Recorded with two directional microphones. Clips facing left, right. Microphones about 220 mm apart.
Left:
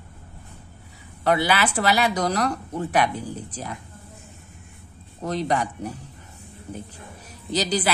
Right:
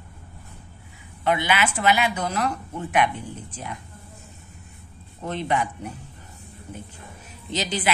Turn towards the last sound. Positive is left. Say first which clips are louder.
# left 4 dB
turn(degrees=35)  # may be behind; listen again after turning